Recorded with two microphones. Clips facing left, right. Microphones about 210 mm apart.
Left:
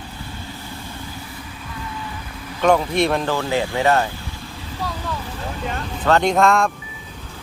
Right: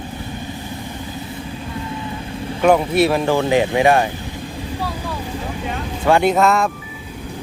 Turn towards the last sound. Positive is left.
turn(degrees=-5)  # may be behind; listen again after turning